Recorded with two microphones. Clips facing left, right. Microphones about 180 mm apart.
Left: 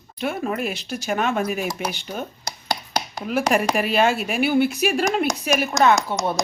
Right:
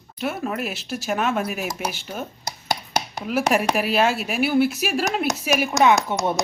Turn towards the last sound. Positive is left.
turn(degrees=-20)  # may be behind; listen again after turning